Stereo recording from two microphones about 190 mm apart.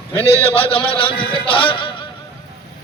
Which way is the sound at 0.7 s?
30° left (ahead or behind).